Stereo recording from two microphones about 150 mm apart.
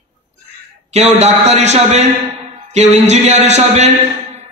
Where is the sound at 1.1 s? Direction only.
50° right (ahead or behind).